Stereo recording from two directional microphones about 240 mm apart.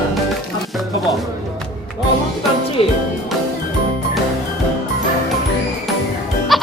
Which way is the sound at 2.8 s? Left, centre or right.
Left.